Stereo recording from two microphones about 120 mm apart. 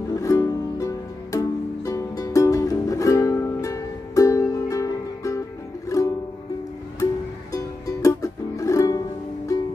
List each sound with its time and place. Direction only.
0.1 s music: 25° left (ahead or behind)
7.5 s music: 25° left (ahead or behind)